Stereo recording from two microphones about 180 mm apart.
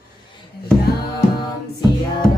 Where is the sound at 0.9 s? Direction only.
60° left (ahead or behind).